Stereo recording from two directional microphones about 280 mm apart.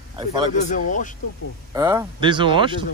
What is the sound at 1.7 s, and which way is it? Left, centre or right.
Speech, centre.